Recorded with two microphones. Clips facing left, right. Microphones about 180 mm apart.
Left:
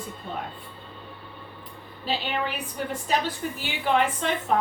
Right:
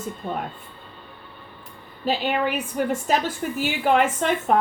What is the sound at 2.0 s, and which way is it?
A woman's voice, 50° right (ahead or behind).